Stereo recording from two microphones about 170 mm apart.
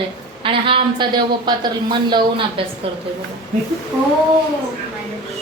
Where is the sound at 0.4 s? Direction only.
30° right (ahead or behind).